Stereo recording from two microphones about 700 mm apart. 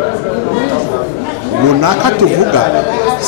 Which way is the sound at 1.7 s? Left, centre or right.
Right.